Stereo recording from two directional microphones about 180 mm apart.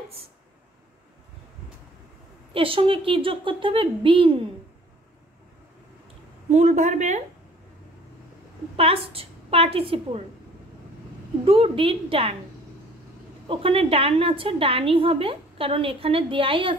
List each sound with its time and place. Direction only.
2.5 s a woman's voice: 30° right (ahead or behind)
6.5 s a woman's voice: 40° right (ahead or behind)
8.7 s a woman's voice: 35° right (ahead or behind)
11.4 s a woman's voice: 30° right (ahead or behind)
13.5 s a woman's voice: 30° right (ahead or behind)